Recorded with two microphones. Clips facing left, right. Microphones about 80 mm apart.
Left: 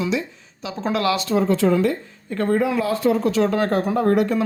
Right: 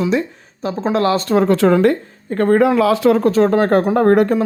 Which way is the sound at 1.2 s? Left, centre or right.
Right.